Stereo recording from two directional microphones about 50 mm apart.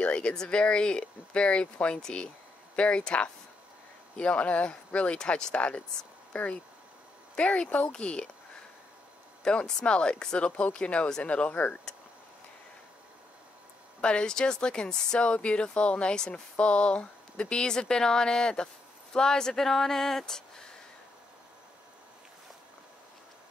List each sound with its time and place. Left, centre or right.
0.0 s speech: left
9.4 s speech: centre
14.0 s speech: centre